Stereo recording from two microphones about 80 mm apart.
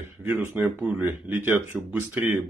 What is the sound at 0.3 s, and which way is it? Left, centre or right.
Speech, right.